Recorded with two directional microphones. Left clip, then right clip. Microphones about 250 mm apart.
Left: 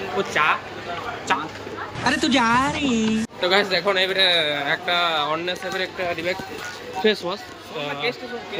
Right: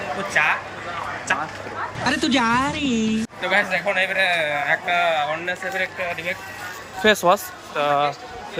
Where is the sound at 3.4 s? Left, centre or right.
Centre.